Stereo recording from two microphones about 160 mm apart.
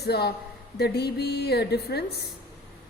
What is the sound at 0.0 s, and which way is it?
A woman's voice, 90° left.